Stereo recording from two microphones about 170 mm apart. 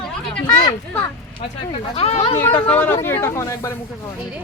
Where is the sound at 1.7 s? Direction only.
35° left (ahead or behind).